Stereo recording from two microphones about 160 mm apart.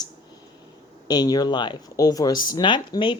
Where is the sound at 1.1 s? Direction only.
25° left (ahead or behind).